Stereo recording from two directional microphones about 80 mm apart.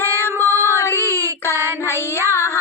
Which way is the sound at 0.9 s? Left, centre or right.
Right.